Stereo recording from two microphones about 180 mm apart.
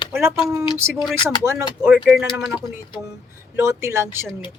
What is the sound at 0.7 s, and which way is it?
Speech, 15° right (ahead or behind).